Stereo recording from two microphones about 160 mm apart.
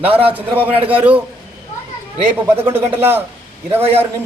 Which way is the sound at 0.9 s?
10° right (ahead or behind).